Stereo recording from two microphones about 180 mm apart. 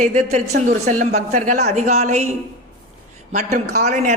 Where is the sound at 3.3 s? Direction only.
40° right (ahead or behind).